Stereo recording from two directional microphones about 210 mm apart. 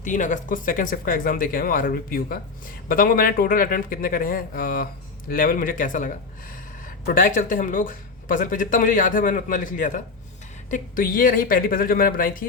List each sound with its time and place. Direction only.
0.0 s speech: 35° left (ahead or behind)